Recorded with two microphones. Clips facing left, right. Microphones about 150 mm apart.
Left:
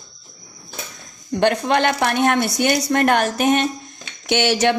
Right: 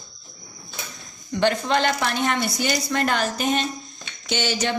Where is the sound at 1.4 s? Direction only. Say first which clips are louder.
Left 3 dB; 55° left (ahead or behind).